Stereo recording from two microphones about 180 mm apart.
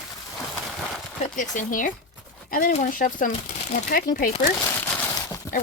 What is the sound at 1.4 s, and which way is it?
Speech, 45° left (ahead or behind).